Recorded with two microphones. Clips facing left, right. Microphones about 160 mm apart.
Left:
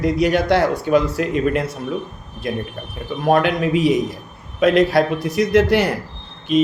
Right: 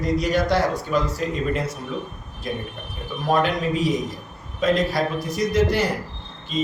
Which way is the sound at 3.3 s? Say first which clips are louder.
Left 4 dB; 65° left (ahead or behind).